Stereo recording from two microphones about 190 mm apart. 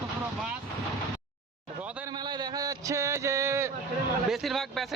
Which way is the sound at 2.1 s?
20° right (ahead or behind).